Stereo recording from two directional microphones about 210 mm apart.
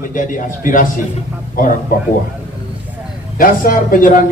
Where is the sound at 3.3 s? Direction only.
40° left (ahead or behind).